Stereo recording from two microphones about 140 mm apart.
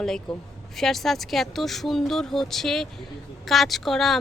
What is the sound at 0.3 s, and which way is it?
Speech, 5° left (ahead or behind).